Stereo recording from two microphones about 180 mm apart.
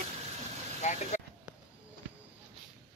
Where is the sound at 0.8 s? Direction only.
40° left (ahead or behind).